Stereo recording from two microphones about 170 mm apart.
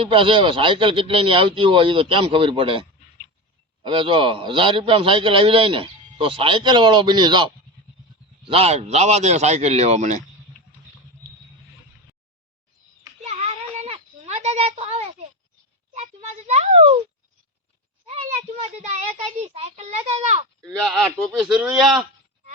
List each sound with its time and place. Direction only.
0.0 s a man's voice: 30° right (ahead or behind)
3.8 s a man's voice: 30° right (ahead or behind)
8.4 s a man's voice: 35° right (ahead or behind)
13.2 s a sound: 40° right (ahead or behind)
18.0 s a child's voice: 40° right (ahead or behind)
20.7 s speech: centre (ahead or behind)